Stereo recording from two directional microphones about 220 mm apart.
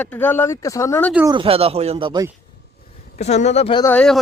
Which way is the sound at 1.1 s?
10° right (ahead or behind).